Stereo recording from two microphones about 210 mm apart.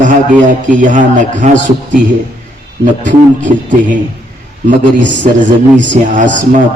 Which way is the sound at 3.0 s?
35° right (ahead or behind).